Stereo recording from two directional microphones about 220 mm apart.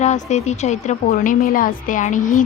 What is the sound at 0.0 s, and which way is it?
A woman's voice, 30° left (ahead or behind).